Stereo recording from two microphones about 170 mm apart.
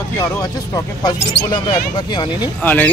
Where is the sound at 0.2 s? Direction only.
20° left (ahead or behind).